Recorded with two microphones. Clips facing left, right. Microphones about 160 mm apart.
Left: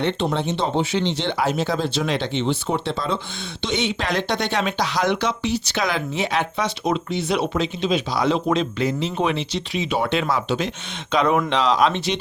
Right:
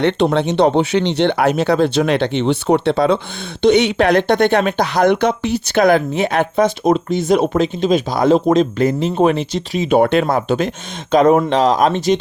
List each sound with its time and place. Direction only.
0.0 s speech: 70° right (ahead or behind); by 12.1 s 45° right (ahead or behind)